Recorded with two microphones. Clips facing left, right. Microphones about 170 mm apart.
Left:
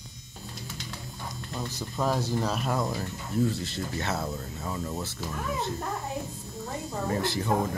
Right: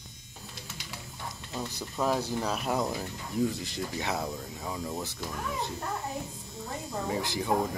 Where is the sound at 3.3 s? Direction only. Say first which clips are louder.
Left 2 dB; 15° right (ahead or behind).